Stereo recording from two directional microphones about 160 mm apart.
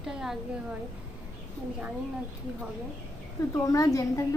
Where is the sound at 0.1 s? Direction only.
5° right (ahead or behind).